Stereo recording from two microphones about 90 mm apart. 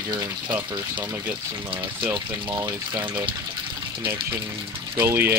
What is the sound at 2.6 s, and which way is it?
Speech, 35° right (ahead or behind).